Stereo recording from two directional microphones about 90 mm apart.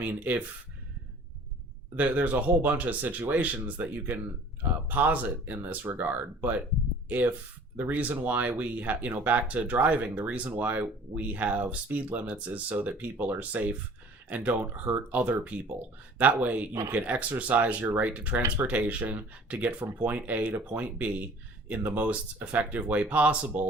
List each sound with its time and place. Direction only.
0.0 s speech: 20° right (ahead or behind)
2.0 s speech: 20° right (ahead or behind)
7.8 s speech: 20° right (ahead or behind)